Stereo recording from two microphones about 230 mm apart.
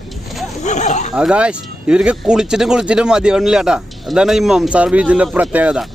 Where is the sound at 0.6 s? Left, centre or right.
Left.